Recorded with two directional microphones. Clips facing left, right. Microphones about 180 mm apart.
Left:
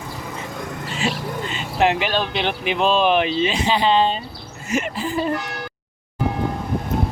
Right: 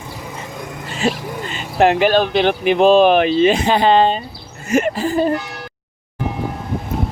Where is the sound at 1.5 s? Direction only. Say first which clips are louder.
Right 5 dB; 45° right (ahead or behind).